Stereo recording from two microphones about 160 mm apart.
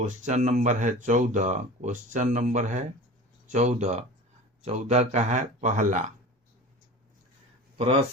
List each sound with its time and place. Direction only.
0.0 s speech: 45° right (ahead or behind)